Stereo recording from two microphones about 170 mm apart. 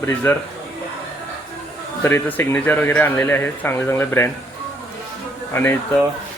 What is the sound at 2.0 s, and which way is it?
Speech, 10° left (ahead or behind).